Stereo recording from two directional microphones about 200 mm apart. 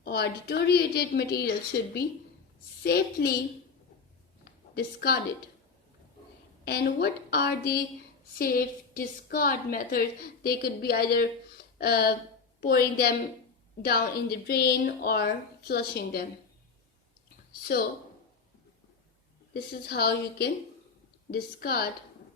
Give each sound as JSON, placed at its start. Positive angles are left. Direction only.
{"t": 0.0, "sound": "a woman's voice", "side_deg": 55}
{"t": 4.7, "sound": "a woman's voice", "side_deg": 50}
{"t": 6.7, "sound": "a woman's voice", "side_deg": 55}
{"t": 19.9, "sound": "a woman's voice", "side_deg": 55}